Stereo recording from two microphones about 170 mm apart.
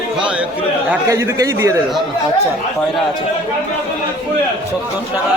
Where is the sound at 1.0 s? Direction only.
20° right (ahead or behind).